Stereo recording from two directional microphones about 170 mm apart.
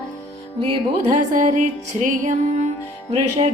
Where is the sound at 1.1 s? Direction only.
50° right (ahead or behind).